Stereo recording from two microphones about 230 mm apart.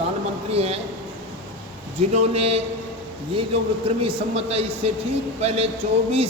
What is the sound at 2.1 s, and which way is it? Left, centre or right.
A man's voice, right.